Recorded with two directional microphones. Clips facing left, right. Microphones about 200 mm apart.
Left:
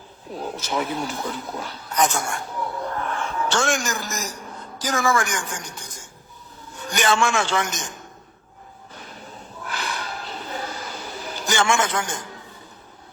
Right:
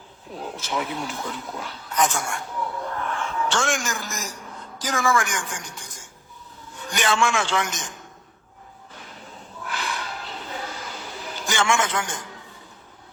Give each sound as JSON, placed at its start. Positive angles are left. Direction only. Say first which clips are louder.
{"t": 0.3, "sound": "a woman's voice", "louder": "left 2 dB", "side_deg": 40}
{"t": 6.8, "sound": "a woman's voice", "louder": "left 2 dB", "side_deg": 40}
{"t": 9.6, "sound": "a sound", "louder": "even", "side_deg": 40}